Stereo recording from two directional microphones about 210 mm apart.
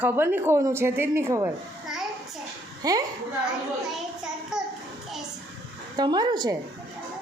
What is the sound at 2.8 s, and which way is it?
Speech, 15° right (ahead or behind).